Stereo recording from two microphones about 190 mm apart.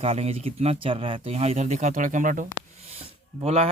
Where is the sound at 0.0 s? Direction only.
35° right (ahead or behind).